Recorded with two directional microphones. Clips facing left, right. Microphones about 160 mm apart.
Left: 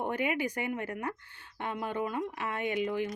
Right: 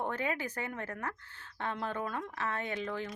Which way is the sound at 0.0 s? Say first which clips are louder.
Left 4 dB; 15° left (ahead or behind).